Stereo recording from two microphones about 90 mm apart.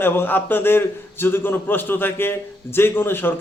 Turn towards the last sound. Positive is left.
turn(degrees=25)  # may be behind; listen again after turning